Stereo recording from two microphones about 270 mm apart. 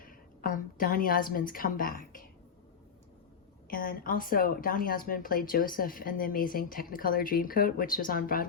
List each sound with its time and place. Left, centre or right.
0.0 s a woman's voice: left
3.7 s speech: left